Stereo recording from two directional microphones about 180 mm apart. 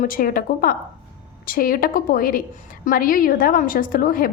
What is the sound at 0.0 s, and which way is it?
A woman's voice, 50° left (ahead or behind).